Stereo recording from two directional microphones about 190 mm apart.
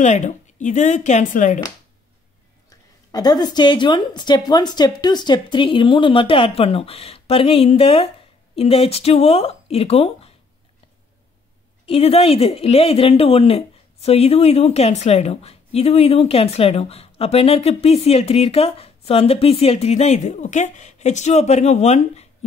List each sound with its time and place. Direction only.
0.0 s speech: 40° left (ahead or behind)
3.1 s a woman's voice: 20° left (ahead or behind)
11.8 s speech: 30° left (ahead or behind)